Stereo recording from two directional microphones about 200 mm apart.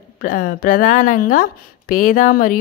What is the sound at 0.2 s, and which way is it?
A woman's voice, 45° left (ahead or behind).